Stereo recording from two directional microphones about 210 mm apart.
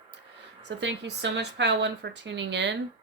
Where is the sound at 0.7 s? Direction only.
55° right (ahead or behind).